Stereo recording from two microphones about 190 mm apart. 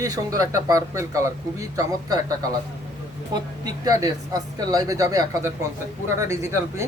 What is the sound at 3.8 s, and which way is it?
Speech, 20° right (ahead or behind).